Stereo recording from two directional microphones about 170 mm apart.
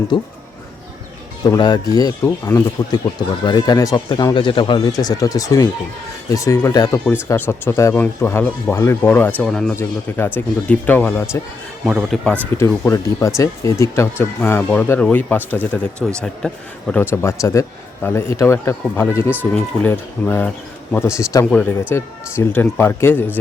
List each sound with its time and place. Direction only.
0.1 s speech: 25° left (ahead or behind)
1.5 s a man's voice: 25° left (ahead or behind)
11.9 s speech: centre (ahead or behind)
12.5 s a man's voice: 15° left (ahead or behind)